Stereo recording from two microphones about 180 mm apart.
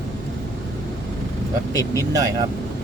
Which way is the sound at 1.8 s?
20° right (ahead or behind).